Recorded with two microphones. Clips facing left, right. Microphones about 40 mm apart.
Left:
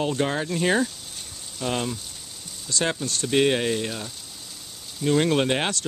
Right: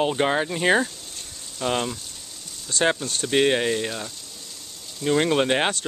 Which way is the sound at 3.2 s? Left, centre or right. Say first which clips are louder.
Right 1 dB; centre.